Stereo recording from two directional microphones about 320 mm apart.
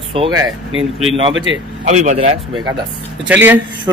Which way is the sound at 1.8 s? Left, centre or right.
Right.